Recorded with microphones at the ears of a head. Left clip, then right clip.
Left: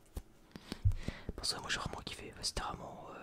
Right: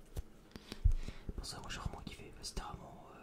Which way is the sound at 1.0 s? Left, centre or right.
Left.